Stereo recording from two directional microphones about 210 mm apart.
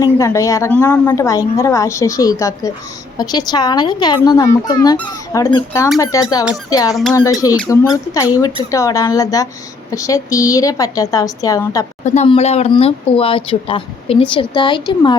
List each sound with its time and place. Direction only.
0.0 s a woman's voice: 15° left (ahead or behind)
6.9 s speech: centre (ahead or behind)
7.7 s a woman's voice: 15° left (ahead or behind)
12.0 s speech: 30° left (ahead or behind)